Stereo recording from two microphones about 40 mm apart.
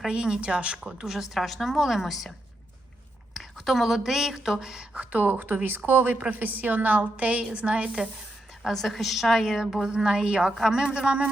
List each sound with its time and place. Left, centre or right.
0.1 s speech: right
0.8 s a woman's voice: centre
3.6 s a woman's voice: centre
4.9 s speech: right
5.6 s speech: right
6.1 s a woman's voice: right
8.6 s a woman's voice: centre; by 11.3 s right